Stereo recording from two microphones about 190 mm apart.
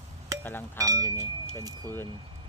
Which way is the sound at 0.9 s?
20° right (ahead or behind).